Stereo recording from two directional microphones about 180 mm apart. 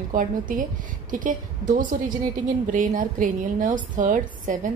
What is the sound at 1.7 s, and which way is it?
A woman's voice, 45° right (ahead or behind).